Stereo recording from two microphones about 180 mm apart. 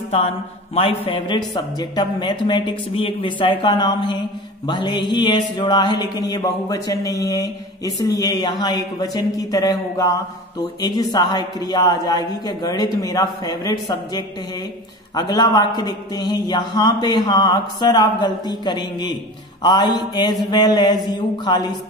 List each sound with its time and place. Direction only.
0.7 s a man's voice: 30° left (ahead or behind)